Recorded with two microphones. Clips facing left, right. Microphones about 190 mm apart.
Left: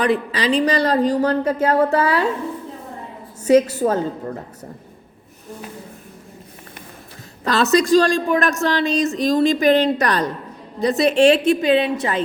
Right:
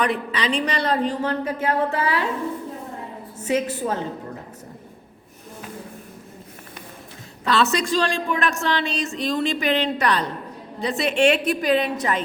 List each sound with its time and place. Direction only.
0.0 s speech: 35° left (ahead or behind)
3.4 s speech: 40° left (ahead or behind)
7.4 s speech: 40° left (ahead or behind)